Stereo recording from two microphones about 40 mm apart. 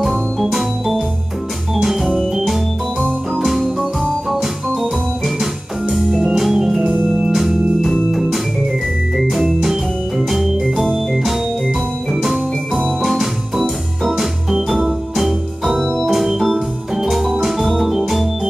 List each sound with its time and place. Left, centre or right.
0.4 s organ: centre
6.0 s music: centre
6.3 s organ: centre
8.1 s music: centre
9.1 s organ: centre
15.8 s organ: centre
16.1 s organ: centre